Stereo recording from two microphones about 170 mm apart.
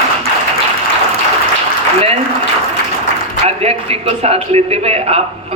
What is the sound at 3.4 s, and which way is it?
A man's voice, 35° right (ahead or behind).